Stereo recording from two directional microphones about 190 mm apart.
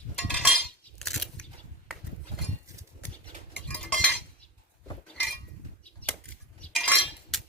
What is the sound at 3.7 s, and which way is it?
Cutlery, 5° left (ahead or behind).